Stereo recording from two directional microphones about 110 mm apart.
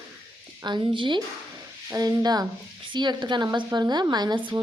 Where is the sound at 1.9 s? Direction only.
35° right (ahead or behind).